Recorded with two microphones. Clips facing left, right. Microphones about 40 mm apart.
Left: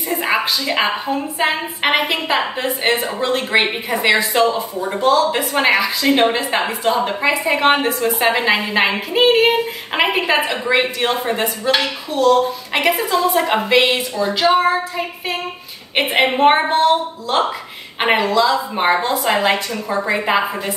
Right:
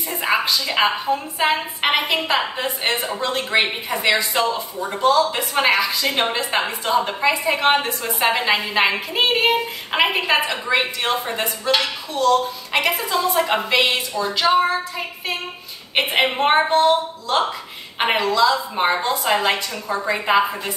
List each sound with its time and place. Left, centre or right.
0.1 s a woman's voice: centre
14.5 s a woman's voice: centre
15.9 s a woman's voice: centre
17.9 s a woman's voice: centre
18.9 s a woman's voice: centre
19.1 s a woman's voice: centre